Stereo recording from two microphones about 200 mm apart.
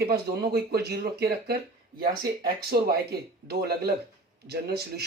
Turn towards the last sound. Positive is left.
turn(degrees=-55)  # may be behind; listen again after turning